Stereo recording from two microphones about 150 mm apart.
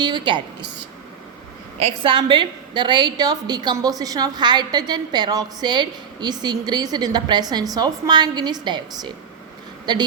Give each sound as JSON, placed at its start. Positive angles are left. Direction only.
{"t": 0.0, "sound": "a woman's voice", "side_deg": -30}
{"t": 1.8, "sound": "a woman's voice", "side_deg": -35}